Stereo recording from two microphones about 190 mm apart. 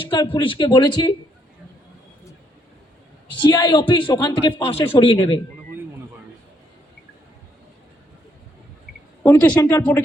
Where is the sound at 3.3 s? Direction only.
25° left (ahead or behind).